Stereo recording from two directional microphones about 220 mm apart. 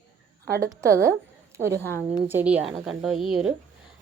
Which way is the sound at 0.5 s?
15° right (ahead or behind).